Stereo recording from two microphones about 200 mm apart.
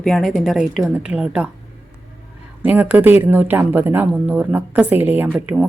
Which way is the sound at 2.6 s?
10° right (ahead or behind).